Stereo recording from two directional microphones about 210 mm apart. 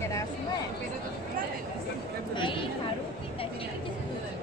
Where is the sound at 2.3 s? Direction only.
25° left (ahead or behind).